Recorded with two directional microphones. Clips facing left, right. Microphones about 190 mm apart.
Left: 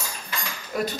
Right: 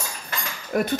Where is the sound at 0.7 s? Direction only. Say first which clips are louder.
Right 4 dB; 55° right (ahead or behind).